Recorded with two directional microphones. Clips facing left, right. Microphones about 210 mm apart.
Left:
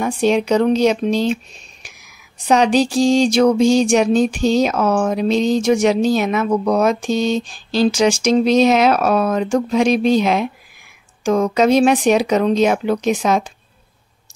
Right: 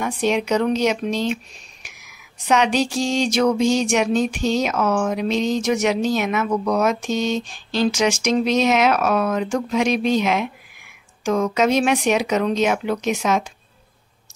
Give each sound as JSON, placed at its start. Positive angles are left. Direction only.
{"t": 0.0, "sound": "speech", "side_deg": 30}